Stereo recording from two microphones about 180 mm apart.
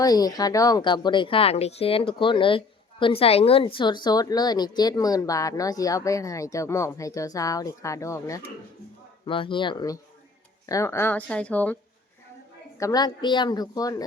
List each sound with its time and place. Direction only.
0.0 s speech: 20° left (ahead or behind)
9.2 s speech: 30° left (ahead or behind); by 11.8 s 10° left (ahead or behind)
12.8 s speech: 20° left (ahead or behind)